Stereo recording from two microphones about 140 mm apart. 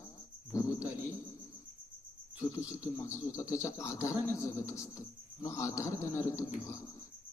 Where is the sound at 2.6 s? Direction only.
20° left (ahead or behind).